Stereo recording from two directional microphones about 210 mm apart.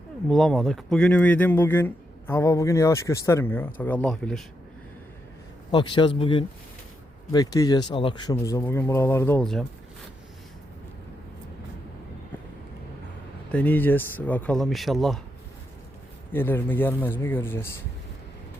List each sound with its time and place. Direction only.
0.3 s speech: centre (ahead or behind)
5.7 s a man's voice: 25° left (ahead or behind); by 9.6 s 5° left (ahead or behind)
13.5 s speech: 10° left (ahead or behind)
16.3 s speech: 10° left (ahead or behind)